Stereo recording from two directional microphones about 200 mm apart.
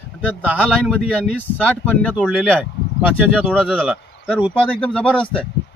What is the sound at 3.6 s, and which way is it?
Speech, 5° right (ahead or behind).